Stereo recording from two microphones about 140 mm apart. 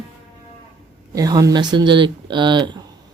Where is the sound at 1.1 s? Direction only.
25° right (ahead or behind).